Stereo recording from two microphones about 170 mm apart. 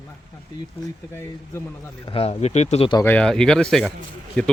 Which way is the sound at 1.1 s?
15° left (ahead or behind).